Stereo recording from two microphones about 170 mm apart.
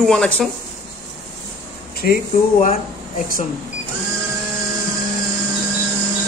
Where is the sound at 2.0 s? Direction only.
60° left (ahead or behind).